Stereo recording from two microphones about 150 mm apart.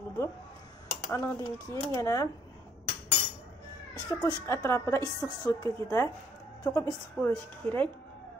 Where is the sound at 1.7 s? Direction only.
20° left (ahead or behind).